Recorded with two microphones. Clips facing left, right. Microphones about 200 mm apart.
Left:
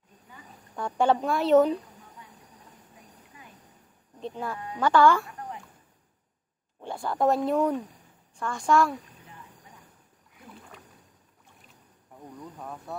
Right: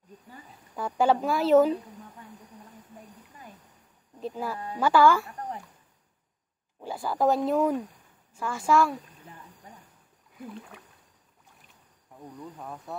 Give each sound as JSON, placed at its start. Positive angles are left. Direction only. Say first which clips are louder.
{"t": 0.7, "sound": "speech", "louder": "even", "side_deg": -5}
{"t": 4.2, "sound": "speech", "louder": "right 1 dB", "side_deg": -5}
{"t": 6.8, "sound": "speech", "louder": "even", "side_deg": -5}
{"t": 12.5, "sound": "speech", "louder": "even", "side_deg": 0}